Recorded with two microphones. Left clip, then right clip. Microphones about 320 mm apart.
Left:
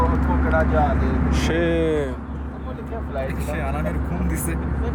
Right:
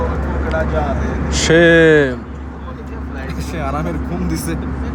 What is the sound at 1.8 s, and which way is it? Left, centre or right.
Speech, right.